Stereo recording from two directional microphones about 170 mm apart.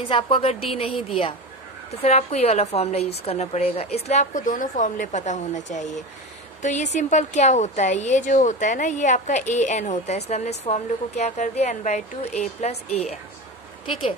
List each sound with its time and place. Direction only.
0.1 s a woman's voice: 35° left (ahead or behind)
2.0 s a woman's voice: 40° left (ahead or behind)